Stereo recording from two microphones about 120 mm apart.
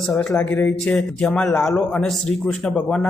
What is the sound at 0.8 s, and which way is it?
A man's voice, 5° left (ahead or behind).